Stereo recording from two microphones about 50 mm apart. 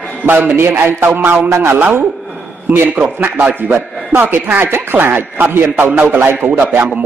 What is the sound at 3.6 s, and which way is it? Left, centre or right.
A man's voice, right.